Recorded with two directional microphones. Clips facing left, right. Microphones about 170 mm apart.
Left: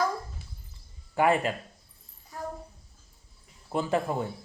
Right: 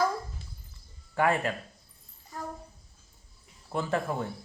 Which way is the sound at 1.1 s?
15° left (ahead or behind).